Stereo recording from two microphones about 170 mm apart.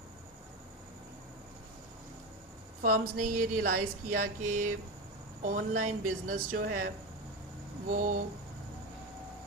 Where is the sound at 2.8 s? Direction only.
55° right (ahead or behind).